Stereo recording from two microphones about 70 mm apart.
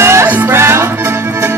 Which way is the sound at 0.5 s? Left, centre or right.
Right.